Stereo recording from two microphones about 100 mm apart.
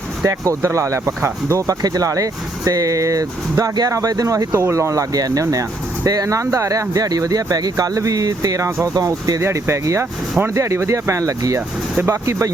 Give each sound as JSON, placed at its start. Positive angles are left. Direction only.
{"t": 0.2, "sound": "speech", "side_deg": -30}